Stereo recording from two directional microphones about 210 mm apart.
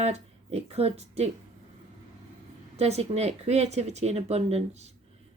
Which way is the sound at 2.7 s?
30° right (ahead or behind).